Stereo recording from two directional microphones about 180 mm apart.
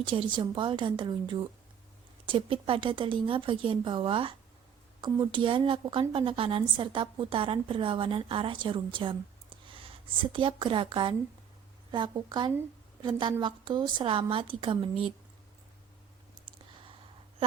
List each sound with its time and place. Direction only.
0.0 s a woman's voice: 25° right (ahead or behind)